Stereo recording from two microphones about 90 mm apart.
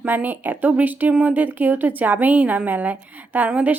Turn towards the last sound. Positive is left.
turn(degrees=-15)  # may be behind; listen again after turning